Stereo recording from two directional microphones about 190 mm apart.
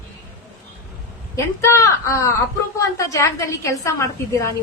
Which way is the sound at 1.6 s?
15° left (ahead or behind).